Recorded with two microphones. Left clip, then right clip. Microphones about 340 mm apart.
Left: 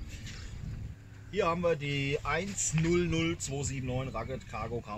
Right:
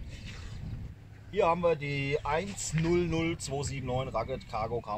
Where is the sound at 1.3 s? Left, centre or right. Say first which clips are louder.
Right 3 dB; centre.